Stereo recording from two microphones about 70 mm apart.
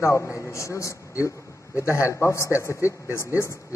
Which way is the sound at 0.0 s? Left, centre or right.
Left.